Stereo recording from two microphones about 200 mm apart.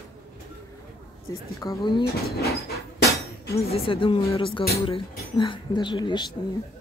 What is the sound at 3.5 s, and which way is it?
Speech, 30° left (ahead or behind).